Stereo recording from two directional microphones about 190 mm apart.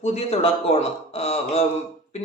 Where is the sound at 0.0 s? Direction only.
35° left (ahead or behind).